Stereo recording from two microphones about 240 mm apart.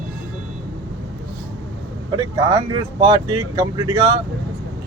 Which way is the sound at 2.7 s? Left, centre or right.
Right.